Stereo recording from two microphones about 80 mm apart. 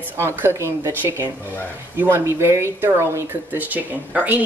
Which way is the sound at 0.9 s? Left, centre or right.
Right.